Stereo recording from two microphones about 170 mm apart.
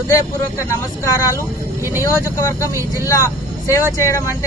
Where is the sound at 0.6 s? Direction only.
20° left (ahead or behind).